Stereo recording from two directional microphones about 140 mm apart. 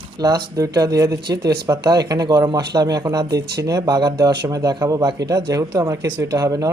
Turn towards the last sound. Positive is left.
turn(degrees=-25)  # may be behind; listen again after turning